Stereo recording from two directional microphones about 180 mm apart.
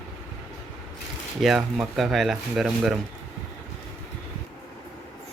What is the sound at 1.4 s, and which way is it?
Speech, centre (ahead or behind).